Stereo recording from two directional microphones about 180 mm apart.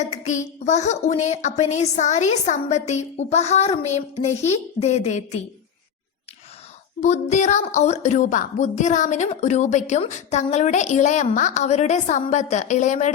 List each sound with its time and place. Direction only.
0.0 s a woman's voice: 40° left (ahead or behind)
7.0 s a woman's voice: 40° left (ahead or behind)